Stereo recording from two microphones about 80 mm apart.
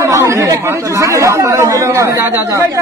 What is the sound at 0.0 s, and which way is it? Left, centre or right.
Speech, right.